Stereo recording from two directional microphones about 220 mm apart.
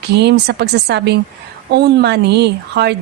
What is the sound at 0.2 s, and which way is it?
A woman's voice, 50° right (ahead or behind).